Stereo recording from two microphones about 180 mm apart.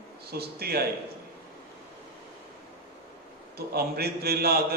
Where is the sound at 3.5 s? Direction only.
60° right (ahead or behind).